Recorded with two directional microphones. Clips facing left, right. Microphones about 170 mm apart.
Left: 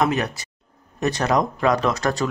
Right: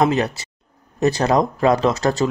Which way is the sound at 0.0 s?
25° right (ahead or behind).